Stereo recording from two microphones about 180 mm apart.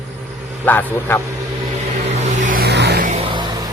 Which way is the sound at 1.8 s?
40° right (ahead or behind).